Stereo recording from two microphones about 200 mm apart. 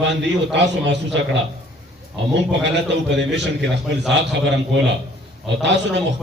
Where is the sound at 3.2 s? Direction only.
60° right (ahead or behind).